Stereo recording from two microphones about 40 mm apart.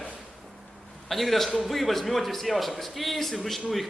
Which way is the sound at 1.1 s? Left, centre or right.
Centre.